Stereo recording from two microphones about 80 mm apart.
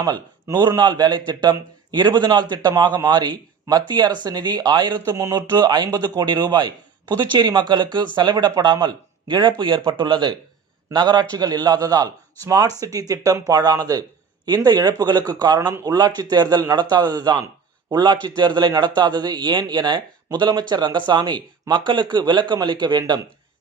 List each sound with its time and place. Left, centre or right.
0.8 s a man's voice: right
5.1 s speech: right
5.5 s a man's voice: right
10.9 s a man's voice: right